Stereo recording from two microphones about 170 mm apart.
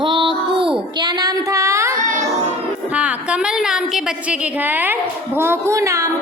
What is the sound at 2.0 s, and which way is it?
Child singing, 50° right (ahead or behind).